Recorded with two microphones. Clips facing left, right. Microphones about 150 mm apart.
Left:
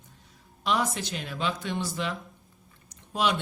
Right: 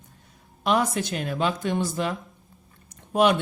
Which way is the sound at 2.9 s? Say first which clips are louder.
Right 7 dB; 55° right (ahead or behind).